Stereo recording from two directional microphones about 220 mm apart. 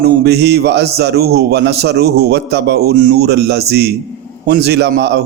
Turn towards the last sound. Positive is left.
turn(degrees=-50)  # may be behind; listen again after turning